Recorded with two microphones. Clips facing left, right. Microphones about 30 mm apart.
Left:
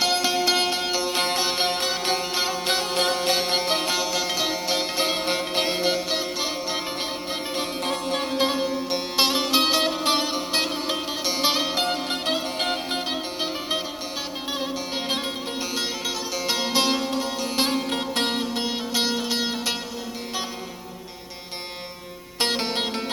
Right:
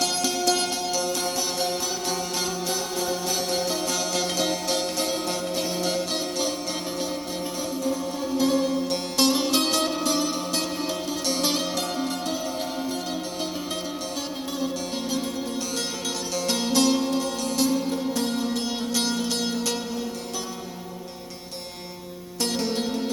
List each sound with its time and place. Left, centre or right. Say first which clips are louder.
0.0 s music: left 3 dB; left
2.6 s music: left 4 dB; left
3.9 s music: left 1 dB; left
5.9 s music: left 2 dB; left
7.5 s music: left 2 dB; left
7.9 s music: left 1 dB; left
8.4 s music: right 4 dB; left
10.0 s music: left 2 dB; left
11.3 s music: left 2 dB; left
13.1 s music: left 2 dB; left
15.8 s music: left 2 dB; left
17.6 s music: even; left
18.6 s music: left 1 dB; left
22.4 s music: left 2 dB; left